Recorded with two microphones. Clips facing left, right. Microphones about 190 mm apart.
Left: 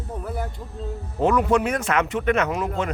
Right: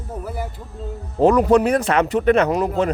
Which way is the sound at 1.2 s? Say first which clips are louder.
Right 6 dB; 35° right (ahead or behind).